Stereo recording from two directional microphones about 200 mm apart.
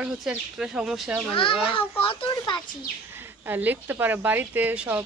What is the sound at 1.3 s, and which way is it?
Speech, 25° left (ahead or behind).